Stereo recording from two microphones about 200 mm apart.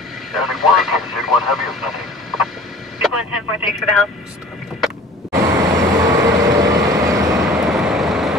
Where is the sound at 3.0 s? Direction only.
5° right (ahead or behind).